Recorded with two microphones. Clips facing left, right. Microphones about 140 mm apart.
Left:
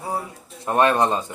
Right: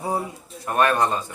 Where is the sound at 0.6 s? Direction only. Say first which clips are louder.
Left 2 dB; 20° left (ahead or behind).